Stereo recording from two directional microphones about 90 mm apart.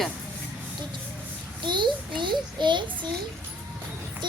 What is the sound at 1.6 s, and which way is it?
A child's voice, 60° right (ahead or behind).